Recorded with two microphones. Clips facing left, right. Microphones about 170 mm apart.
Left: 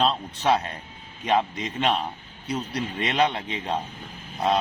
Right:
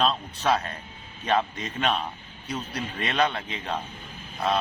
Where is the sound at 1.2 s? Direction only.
20° left (ahead or behind).